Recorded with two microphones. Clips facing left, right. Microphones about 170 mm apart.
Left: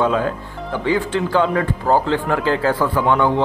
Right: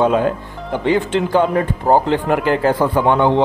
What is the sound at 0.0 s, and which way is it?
A man's voice, 20° right (ahead or behind).